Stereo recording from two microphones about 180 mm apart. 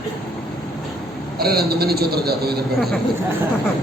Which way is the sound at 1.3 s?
60° right (ahead or behind).